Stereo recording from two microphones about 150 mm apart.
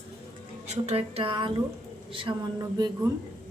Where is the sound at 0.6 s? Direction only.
45° right (ahead or behind).